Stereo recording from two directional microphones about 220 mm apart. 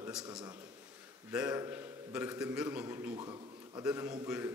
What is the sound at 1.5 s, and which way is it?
A man's voice, 15° right (ahead or behind).